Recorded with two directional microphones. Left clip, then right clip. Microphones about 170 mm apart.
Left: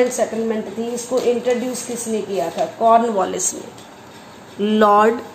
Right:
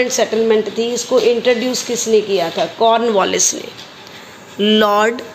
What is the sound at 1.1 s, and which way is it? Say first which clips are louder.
Speech: right 6 dB; 30° right (ahead or behind).